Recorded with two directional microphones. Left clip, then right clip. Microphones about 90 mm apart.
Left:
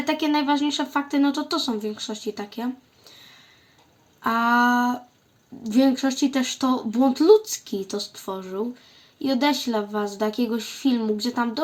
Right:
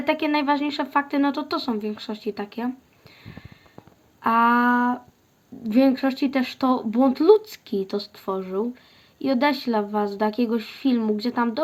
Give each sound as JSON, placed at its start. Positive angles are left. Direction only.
{"t": 0.0, "sound": "speech", "side_deg": -30}
{"t": 4.2, "sound": "speech", "side_deg": -25}
{"t": 5.6, "sound": "speech", "side_deg": -40}